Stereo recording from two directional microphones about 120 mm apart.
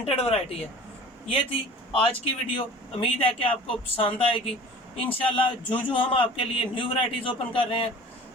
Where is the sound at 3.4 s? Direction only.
50° left (ahead or behind).